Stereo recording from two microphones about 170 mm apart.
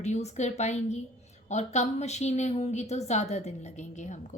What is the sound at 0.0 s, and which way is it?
A woman's voice, 40° left (ahead or behind).